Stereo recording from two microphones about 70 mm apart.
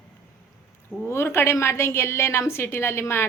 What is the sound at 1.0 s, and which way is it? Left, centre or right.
Speech, left.